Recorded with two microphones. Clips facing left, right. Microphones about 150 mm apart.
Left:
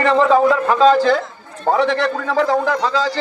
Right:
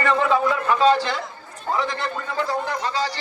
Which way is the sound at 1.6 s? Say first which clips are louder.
Left 9 dB; 75° left (ahead or behind).